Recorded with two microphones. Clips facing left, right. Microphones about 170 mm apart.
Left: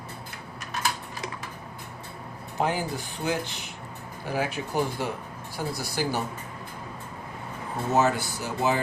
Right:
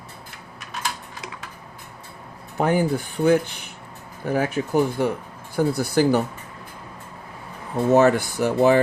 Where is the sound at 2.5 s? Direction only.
55° right (ahead or behind).